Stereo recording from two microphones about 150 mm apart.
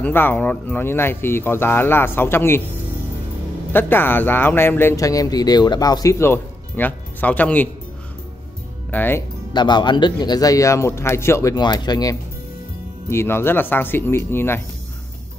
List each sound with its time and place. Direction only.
0.0 s speech: 15° left (ahead or behind)
3.7 s speech: 15° left (ahead or behind)
8.9 s speech: 15° left (ahead or behind)
9.5 s speech: 30° left (ahead or behind)